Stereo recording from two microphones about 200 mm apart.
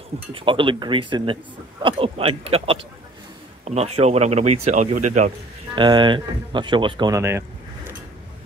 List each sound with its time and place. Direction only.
0.3 s speech: 25° right (ahead or behind)
5.8 s speech: 25° right (ahead or behind)